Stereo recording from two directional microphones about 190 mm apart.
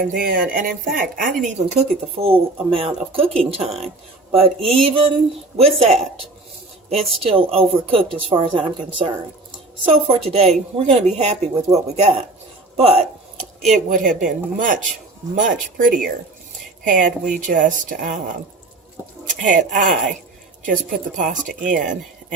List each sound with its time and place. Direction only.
0.0 s speech: 50° right (ahead or behind)
2.1 s a woman's voice: 30° right (ahead or behind)
12.7 s a sound: 30° right (ahead or behind)
13.7 s speech: 45° right (ahead or behind)
19.2 s speech: 40° right (ahead or behind)